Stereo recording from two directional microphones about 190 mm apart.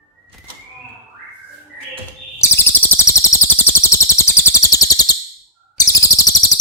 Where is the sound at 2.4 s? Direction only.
10° left (ahead or behind).